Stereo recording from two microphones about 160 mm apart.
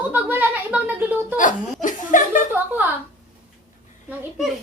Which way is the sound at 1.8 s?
55° left (ahead or behind).